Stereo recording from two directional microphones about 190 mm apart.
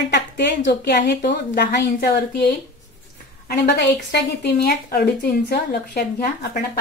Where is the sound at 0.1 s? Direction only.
60° left (ahead or behind).